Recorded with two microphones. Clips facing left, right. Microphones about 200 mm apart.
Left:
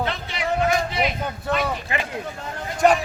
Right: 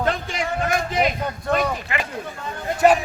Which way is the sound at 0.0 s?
45° right (ahead or behind).